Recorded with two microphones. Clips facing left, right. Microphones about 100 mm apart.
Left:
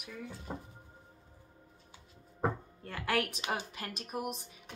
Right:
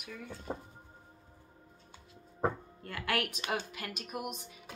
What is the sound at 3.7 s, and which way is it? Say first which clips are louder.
Speech: left 1 dB; 35° left (ahead or behind).